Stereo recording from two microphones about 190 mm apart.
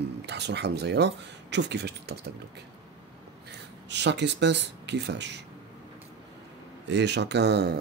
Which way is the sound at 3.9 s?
65° right (ahead or behind).